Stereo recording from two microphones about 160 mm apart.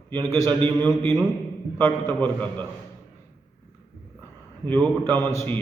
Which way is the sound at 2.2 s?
10° left (ahead or behind).